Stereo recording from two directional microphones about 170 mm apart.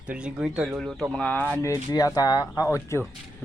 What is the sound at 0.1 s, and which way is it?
Speech, 5° right (ahead or behind).